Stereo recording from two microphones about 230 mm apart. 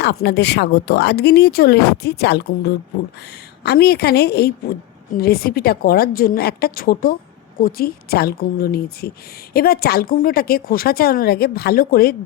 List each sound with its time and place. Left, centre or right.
0.0 s a woman's voice: left